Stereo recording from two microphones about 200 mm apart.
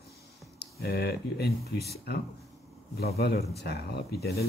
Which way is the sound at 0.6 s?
55° left (ahead or behind).